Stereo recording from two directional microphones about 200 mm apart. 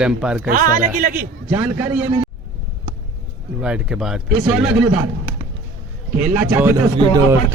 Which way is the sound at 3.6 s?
5° right (ahead or behind).